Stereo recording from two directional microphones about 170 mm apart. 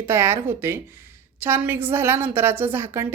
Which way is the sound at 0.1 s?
15° right (ahead or behind).